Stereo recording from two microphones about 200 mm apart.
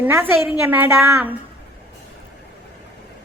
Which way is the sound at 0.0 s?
10° right (ahead or behind).